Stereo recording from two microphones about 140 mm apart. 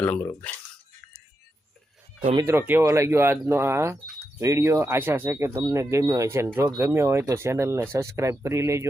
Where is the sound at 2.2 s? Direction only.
35° right (ahead or behind).